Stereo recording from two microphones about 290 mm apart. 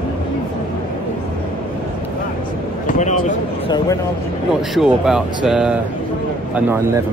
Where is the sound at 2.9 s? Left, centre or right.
Left.